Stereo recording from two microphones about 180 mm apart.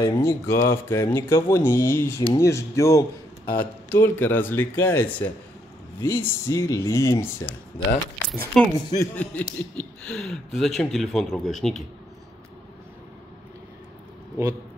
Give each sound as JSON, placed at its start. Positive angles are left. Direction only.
{"t": 0.0, "sound": "speech", "side_deg": 15}
{"t": 8.2, "sound": "speech", "side_deg": 5}